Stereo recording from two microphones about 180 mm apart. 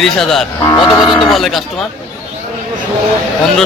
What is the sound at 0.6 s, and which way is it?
Speech, 20° left (ahead or behind).